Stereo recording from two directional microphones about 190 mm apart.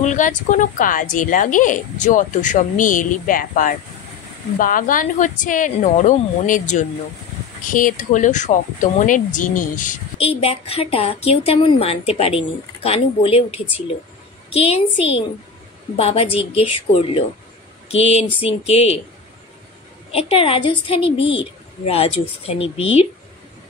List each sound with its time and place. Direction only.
0.0 s a woman's voice: 40° left (ahead or behind)
18.4 s speech: 30° left (ahead or behind)
20.1 s a woman's voice: 30° left (ahead or behind)